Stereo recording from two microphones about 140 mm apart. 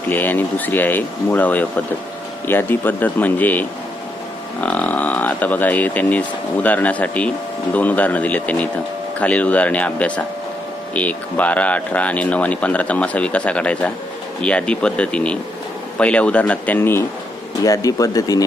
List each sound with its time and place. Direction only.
0.1 s speech: 15° left (ahead or behind)
17.6 s speech: 25° left (ahead or behind)